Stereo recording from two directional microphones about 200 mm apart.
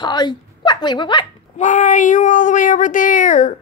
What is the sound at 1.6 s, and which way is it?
A woman's voice, 35° left (ahead or behind).